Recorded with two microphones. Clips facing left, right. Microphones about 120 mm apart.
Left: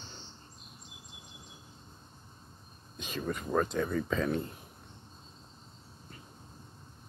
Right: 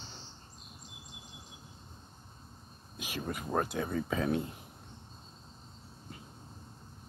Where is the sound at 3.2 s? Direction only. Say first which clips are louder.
Left 3 dB; 15° right (ahead or behind).